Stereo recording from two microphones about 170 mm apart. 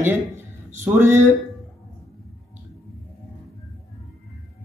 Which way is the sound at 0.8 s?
15° right (ahead or behind).